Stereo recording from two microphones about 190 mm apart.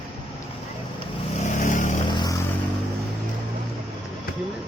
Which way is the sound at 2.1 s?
20° left (ahead or behind).